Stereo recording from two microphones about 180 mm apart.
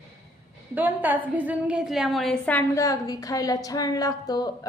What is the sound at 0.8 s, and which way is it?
A woman's voice, 10° right (ahead or behind).